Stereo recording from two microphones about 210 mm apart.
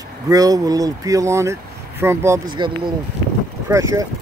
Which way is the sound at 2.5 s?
20° right (ahead or behind).